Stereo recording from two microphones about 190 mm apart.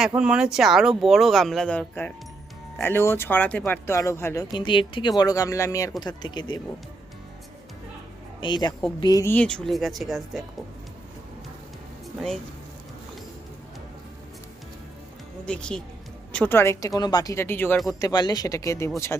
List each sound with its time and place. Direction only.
0.1 s speech: 5° right (ahead or behind); by 4.4 s 15° left (ahead or behind)
4.5 s speech: 25° left (ahead or behind)
8.4 s speech: 25° left (ahead or behind); by 10.4 s centre (ahead or behind)
15.4 s speech: 5° left (ahead or behind)